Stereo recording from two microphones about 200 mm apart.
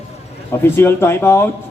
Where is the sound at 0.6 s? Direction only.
10° left (ahead or behind).